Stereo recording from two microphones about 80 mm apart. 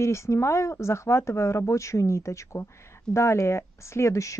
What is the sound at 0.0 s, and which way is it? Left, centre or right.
Speech, left.